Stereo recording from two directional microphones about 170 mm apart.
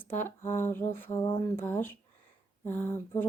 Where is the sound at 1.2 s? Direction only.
25° left (ahead or behind).